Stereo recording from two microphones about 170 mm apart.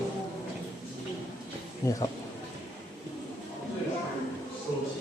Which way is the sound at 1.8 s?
20° left (ahead or behind).